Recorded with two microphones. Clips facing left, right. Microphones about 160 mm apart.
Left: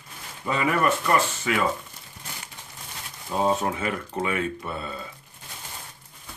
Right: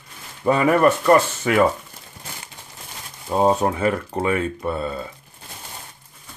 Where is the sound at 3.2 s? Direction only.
40° right (ahead or behind).